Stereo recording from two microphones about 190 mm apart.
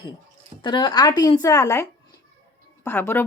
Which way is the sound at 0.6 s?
25° left (ahead or behind).